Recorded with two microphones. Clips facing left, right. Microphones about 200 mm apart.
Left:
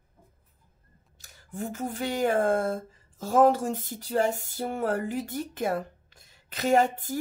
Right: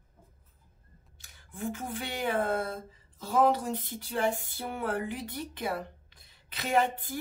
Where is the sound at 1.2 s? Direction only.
45° left (ahead or behind).